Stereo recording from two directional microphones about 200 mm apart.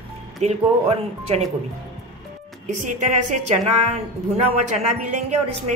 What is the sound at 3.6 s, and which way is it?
Speech, 35° right (ahead or behind).